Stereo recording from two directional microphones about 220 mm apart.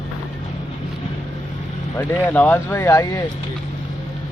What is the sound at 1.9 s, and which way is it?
Speech, 10° left (ahead or behind).